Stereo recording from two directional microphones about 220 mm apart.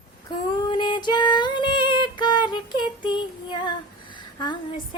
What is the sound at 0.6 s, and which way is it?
Female singing, 20° left (ahead or behind).